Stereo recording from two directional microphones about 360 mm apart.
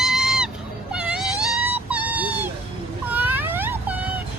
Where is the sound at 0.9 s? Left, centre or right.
Centre.